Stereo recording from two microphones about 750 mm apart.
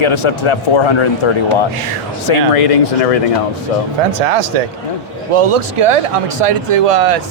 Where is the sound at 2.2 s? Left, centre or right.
Left.